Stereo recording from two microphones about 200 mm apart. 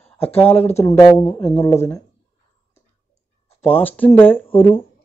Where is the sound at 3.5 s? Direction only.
30° left (ahead or behind).